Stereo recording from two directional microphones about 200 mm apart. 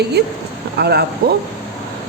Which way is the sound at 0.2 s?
55° right (ahead or behind).